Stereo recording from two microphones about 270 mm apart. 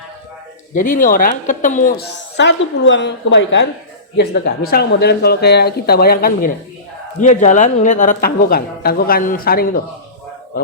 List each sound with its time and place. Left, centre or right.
0.7 s a woman's voice: left